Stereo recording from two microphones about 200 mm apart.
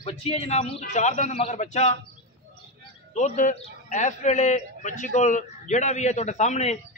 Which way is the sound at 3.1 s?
35° left (ahead or behind).